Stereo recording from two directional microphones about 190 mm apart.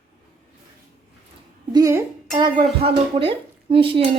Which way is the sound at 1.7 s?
15° right (ahead or behind).